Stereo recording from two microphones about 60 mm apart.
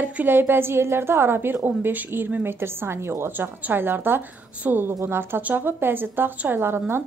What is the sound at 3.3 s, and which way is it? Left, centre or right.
A woman's voice, right.